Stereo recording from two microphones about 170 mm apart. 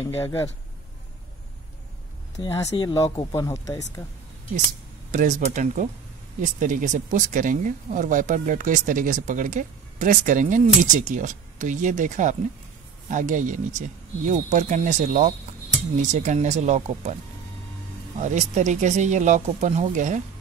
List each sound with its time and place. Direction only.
0.2 s speech: 15° left (ahead or behind)
2.3 s speech: 20° left (ahead or behind)
5.1 s speech: 45° right (ahead or behind)
18.2 s speech: 45° right (ahead or behind)